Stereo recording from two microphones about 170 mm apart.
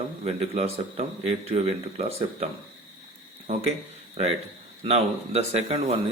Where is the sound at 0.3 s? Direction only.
40° right (ahead or behind).